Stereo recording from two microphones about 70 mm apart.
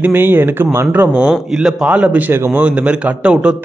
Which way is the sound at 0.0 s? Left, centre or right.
Right.